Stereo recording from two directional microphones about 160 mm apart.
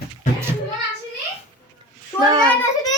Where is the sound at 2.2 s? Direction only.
25° right (ahead or behind).